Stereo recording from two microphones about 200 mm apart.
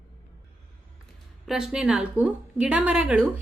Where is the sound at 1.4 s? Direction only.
Centre (ahead or behind).